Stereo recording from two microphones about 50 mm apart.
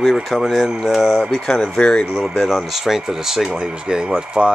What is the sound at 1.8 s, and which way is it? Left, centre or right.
Speech, centre.